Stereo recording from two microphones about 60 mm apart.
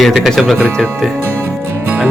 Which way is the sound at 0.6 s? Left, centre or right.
Centre.